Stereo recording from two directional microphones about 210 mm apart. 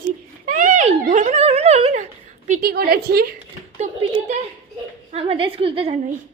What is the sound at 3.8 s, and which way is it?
Speech, 35° right (ahead or behind).